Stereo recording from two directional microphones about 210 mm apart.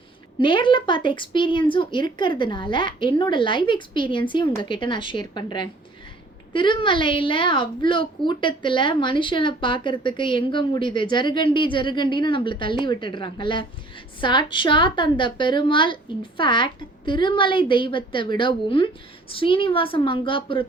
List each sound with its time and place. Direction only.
0.3 s speech: 25° left (ahead or behind)